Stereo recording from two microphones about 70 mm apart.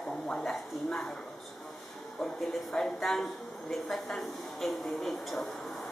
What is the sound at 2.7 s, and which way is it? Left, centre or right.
A woman's voice, centre.